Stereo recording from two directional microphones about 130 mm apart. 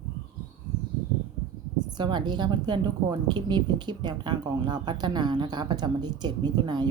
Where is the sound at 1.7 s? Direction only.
35° right (ahead or behind).